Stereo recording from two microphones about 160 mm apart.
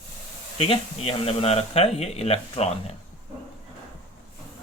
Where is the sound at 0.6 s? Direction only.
35° left (ahead or behind).